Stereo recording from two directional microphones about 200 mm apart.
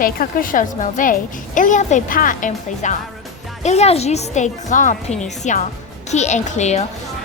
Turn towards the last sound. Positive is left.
turn(degrees=35)  # may be behind; listen again after turning